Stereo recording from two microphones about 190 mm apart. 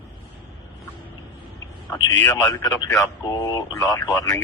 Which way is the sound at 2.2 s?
15° left (ahead or behind).